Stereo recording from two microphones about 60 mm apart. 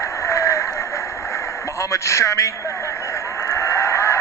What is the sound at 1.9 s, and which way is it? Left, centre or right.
Speech, left.